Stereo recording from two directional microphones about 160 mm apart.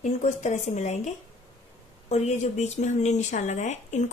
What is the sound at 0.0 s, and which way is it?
Speech, 50° left (ahead or behind).